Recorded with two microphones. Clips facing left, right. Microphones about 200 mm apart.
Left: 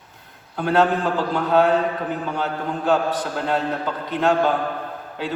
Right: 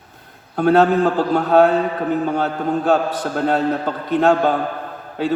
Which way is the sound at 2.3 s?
50° right (ahead or behind).